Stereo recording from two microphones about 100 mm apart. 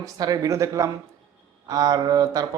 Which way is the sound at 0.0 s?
35° right (ahead or behind).